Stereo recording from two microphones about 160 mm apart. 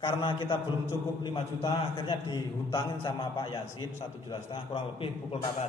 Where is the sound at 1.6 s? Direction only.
30° left (ahead or behind).